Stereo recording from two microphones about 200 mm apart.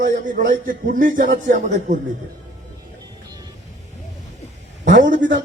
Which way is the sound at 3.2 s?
20° right (ahead or behind).